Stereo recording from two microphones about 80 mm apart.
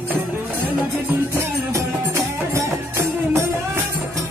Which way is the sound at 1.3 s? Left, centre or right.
Right.